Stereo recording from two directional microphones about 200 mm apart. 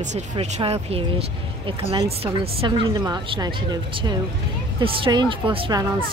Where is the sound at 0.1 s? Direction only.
30° right (ahead or behind).